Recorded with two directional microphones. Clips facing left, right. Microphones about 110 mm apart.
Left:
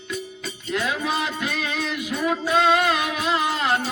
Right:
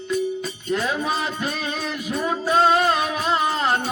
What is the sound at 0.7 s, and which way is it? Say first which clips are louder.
Music: right 1 dB; 35° right (ahead or behind).